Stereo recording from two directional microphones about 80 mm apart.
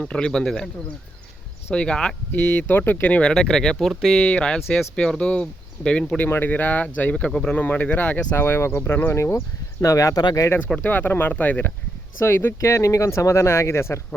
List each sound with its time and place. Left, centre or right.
0.0 s speech: centre
1.7 s speech: centre
4.2 s speech: centre
6.2 s speech: left
7.3 s speech: centre
7.5 s speech: left
8.4 s speech: left
9.8 s speech: left
10.8 s speech: left